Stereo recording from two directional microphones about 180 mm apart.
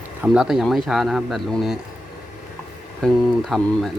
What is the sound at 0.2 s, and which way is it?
A man's voice, 5° right (ahead or behind).